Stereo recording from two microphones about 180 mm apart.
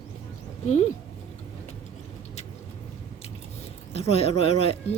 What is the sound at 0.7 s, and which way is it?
Speech, 40° left (ahead or behind).